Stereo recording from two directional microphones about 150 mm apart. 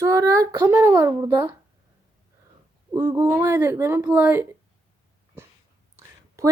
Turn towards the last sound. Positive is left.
turn(degrees=-20)  # may be behind; listen again after turning